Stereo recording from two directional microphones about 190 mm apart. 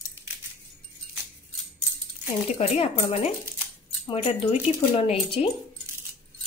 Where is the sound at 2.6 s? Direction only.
30° left (ahead or behind).